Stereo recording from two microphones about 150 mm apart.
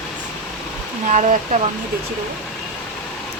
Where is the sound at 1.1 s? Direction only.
55° right (ahead or behind).